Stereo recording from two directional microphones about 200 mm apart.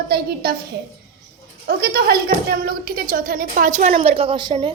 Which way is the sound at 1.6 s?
50° right (ahead or behind).